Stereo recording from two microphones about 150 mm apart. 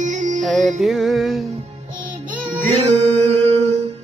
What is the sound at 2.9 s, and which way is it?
Music, 45° right (ahead or behind).